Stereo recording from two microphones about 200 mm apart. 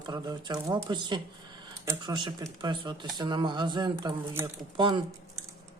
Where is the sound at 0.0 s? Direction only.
20° right (ahead or behind).